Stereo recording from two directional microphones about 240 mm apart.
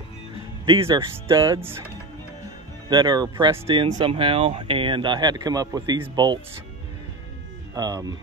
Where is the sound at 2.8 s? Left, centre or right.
Centre.